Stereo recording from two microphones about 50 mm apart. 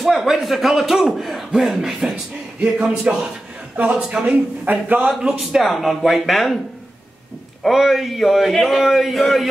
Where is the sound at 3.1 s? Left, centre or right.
Right.